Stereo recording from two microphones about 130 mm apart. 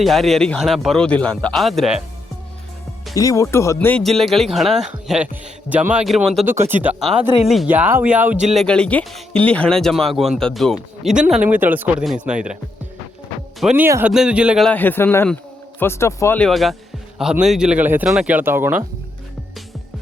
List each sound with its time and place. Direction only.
0.0 s speech: centre (ahead or behind)
3.2 s a man's voice: 25° left (ahead or behind)
3.8 s speech: 10° left (ahead or behind); by 6.0 s 10° right (ahead or behind)
6.1 s speech: centre (ahead or behind)
6.4 s speech: 15° right (ahead or behind)
7.4 s speech: centre (ahead or behind)
7.7 s speech: 15° right (ahead or behind)
8.5 s a man's voice: 5° left (ahead or behind)
13.6 s speech: 5° right (ahead or behind)
14.6 s a man's voice: 10° left (ahead or behind)
16.4 s speech: centre (ahead or behind); by 18.9 s 15° right (ahead or behind)